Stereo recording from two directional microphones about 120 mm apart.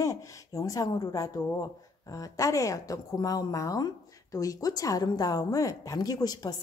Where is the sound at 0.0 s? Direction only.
25° left (ahead or behind).